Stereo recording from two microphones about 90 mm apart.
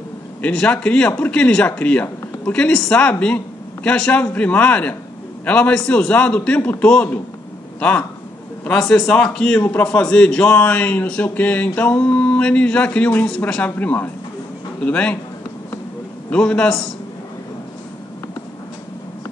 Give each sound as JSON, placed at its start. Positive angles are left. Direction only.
{"t": 0.4, "sound": "a man's voice", "side_deg": 10}
{"t": 8.6, "sound": "a man's voice", "side_deg": 5}
{"t": 16.3, "sound": "a man's voice", "side_deg": 10}